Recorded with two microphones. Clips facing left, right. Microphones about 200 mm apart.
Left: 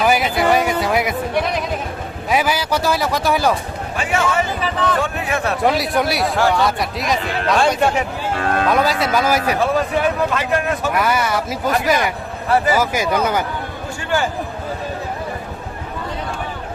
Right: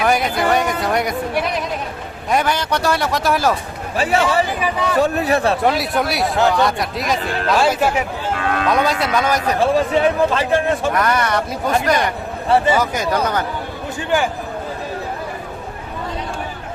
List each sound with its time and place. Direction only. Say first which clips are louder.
0.0 s music: left 1 dB; centre (ahead or behind)
2.3 s speech: even; 5° left (ahead or behind)
3.9 s a man's voice: right 3 dB; 35° right (ahead or behind)
4.6 s speech: even; 10° right (ahead or behind)
4.9 s a man's voice: right 5 dB; 40° right (ahead or behind)
5.6 s speech: left 1 dB; centre (ahead or behind)
9.6 s speech: right 2 dB; 30° right (ahead or behind)
10.9 s speech: even; 5° left (ahead or behind)
12.5 s speech: right 1 dB; 25° right (ahead or behind)
12.8 s speech: left 1 dB; 5° left (ahead or behind)